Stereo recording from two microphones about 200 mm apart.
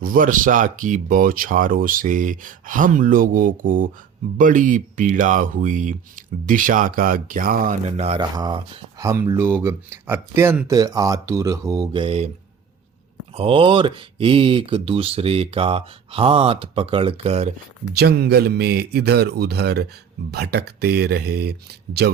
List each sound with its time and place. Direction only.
0.0 s speech: 45° right (ahead or behind)
8.2 s speech: 20° right (ahead or behind)
13.3 s speech: 30° right (ahead or behind)
17.9 s speech: 55° right (ahead or behind)